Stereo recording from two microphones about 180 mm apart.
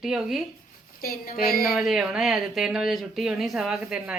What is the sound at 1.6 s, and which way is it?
Speech, centre (ahead or behind).